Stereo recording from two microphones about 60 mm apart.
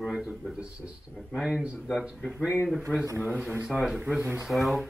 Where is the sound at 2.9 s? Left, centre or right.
Left.